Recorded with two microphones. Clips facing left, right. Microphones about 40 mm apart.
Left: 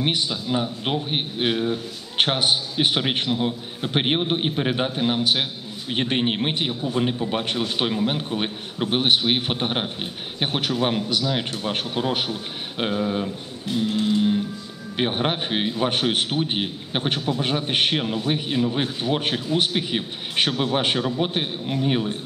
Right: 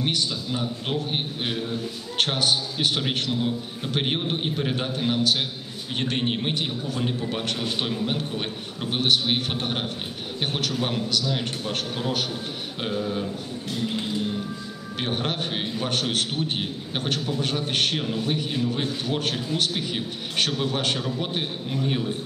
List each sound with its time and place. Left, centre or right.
0.0 s a man's voice: left
15.0 s a man's voice: left